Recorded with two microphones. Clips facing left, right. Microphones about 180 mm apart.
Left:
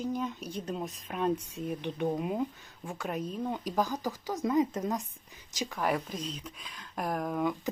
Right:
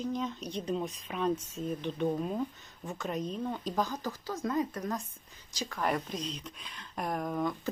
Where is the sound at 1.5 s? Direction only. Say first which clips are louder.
Even; 15° left (ahead or behind).